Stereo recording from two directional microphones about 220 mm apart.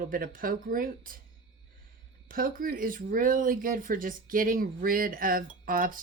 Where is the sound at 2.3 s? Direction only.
40° right (ahead or behind).